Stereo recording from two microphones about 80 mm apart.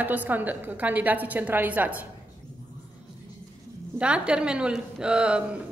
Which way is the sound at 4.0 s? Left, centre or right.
Centre.